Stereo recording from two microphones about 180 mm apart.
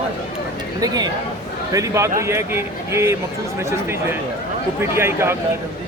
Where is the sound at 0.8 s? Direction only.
20° right (ahead or behind).